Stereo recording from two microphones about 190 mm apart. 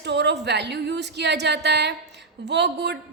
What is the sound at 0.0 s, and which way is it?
A woman's voice, 65° right (ahead or behind).